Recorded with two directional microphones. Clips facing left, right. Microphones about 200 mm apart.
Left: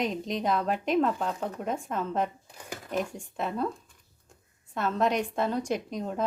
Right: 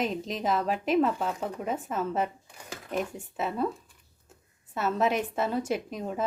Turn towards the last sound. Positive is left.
turn(degrees=-5)  # may be behind; listen again after turning